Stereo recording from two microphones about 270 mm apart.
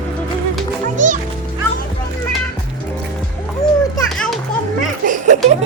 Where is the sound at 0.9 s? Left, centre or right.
Right.